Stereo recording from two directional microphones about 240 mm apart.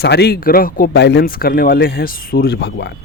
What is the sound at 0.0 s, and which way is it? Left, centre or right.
Speech, left.